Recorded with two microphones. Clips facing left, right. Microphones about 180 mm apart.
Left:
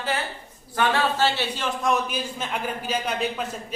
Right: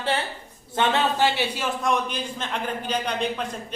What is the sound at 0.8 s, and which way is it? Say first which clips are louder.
Speech: right 1 dB; 20° right (ahead or behind).